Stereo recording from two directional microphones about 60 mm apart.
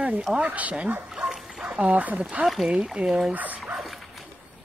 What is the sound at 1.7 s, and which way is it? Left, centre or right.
Speech, right.